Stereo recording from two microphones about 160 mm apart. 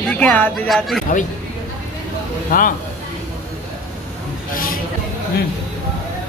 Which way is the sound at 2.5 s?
60° left (ahead or behind).